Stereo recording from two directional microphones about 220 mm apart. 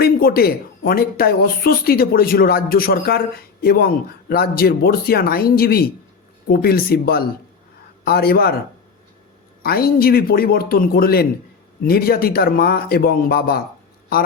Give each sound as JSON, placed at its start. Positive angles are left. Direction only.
{"t": 0.0, "sound": "speech", "side_deg": 45}
{"t": 9.6, "sound": "speech", "side_deg": 45}